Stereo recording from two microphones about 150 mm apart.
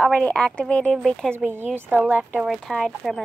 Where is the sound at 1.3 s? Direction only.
15° right (ahead or behind); by 3.2 s centre (ahead or behind).